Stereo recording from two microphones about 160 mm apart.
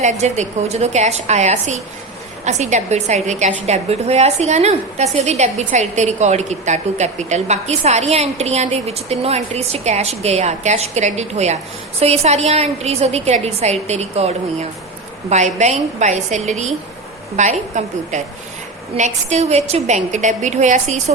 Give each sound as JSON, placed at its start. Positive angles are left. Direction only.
{"t": 0.0, "sound": "a woman's voice", "side_deg": -45}